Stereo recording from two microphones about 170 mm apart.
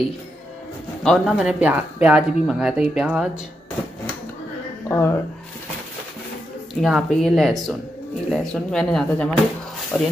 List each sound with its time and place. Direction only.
1.0 s speech: centre (ahead or behind)
4.8 s speech: 15° left (ahead or behind)
6.7 s speech: centre (ahead or behind)